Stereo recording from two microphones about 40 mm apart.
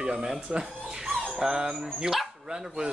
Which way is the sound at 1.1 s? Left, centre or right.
Centre.